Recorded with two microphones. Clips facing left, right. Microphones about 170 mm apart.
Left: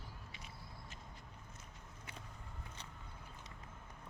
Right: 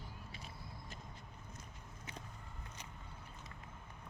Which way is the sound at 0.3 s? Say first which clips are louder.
Right 3 dB; 35° right (ahead or behind).